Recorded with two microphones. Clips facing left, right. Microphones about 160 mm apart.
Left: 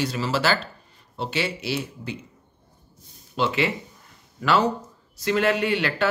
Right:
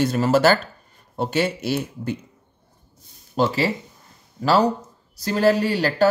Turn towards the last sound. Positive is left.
turn(degrees=-40)  # may be behind; listen again after turning